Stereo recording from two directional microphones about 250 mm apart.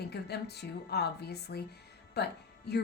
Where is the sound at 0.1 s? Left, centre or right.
Left.